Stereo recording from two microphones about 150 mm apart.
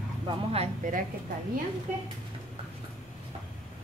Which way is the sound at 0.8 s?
55° right (ahead or behind).